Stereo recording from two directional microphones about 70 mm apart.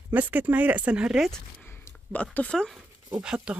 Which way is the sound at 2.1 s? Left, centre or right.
Left.